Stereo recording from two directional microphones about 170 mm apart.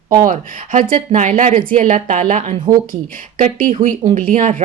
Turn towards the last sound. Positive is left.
turn(degrees=-50)  # may be behind; listen again after turning